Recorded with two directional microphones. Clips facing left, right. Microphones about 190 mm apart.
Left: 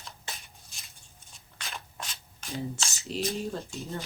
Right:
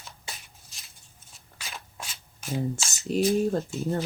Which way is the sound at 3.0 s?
50° right (ahead or behind).